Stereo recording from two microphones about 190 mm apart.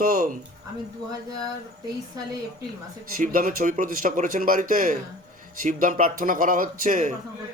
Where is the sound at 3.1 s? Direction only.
45° right (ahead or behind).